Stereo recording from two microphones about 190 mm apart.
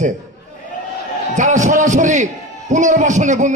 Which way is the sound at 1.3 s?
40° right (ahead or behind).